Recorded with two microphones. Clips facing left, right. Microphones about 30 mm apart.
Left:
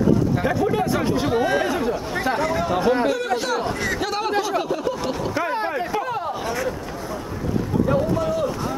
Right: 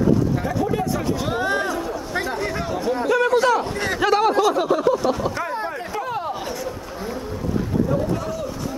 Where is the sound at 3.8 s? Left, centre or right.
Right.